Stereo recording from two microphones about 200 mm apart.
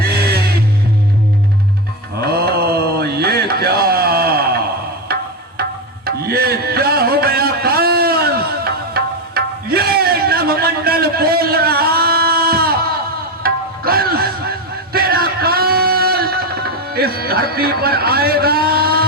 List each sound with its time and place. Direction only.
0.0 s music: 50° right (ahead or behind)
2.2 s mantra: 50° right (ahead or behind)
6.1 s music: 50° right (ahead or behind)